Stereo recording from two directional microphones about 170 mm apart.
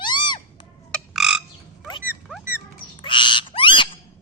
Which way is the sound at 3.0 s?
30° left (ahead or behind).